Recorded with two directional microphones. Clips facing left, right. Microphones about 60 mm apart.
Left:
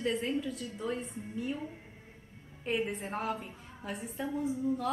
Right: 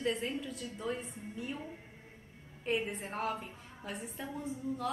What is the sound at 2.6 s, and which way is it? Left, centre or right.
A woman's voice, centre.